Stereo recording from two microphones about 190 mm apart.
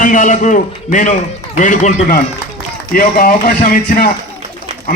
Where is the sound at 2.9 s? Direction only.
50° left (ahead or behind).